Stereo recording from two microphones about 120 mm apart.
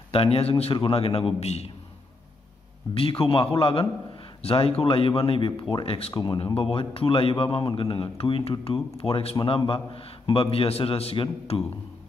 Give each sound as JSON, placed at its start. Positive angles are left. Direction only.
{"t": 0.1, "sound": "a man's voice", "side_deg": 55}
{"t": 2.9, "sound": "a man's voice", "side_deg": 50}
{"t": 6.1, "sound": "a man's voice", "side_deg": 40}